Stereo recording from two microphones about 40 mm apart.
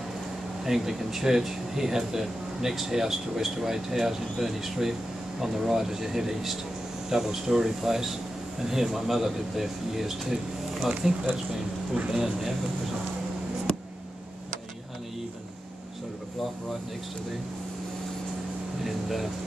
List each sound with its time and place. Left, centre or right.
0.7 s speech: centre
12.1 s speech: centre
18.9 s speech: centre